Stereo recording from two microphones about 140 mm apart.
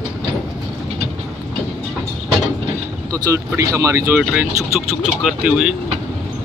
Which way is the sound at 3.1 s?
20° right (ahead or behind).